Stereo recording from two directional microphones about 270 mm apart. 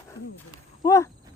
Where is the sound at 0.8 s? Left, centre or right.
Centre.